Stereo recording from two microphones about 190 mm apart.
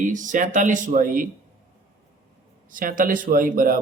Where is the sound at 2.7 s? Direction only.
45° right (ahead or behind).